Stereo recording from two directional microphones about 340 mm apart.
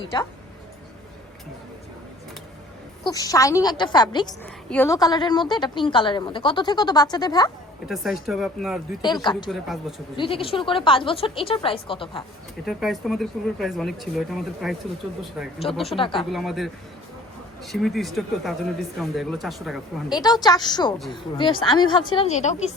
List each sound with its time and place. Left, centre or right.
3.0 s a woman's voice: centre
7.9 s speech: centre
9.2 s a woman's voice: centre
12.6 s speech: centre
16.0 s a woman's voice: centre
16.3 s speech: centre
20.1 s a woman's voice: centre